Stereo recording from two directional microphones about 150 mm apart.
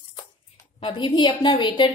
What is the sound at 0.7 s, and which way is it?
A woman's voice, 35° left (ahead or behind).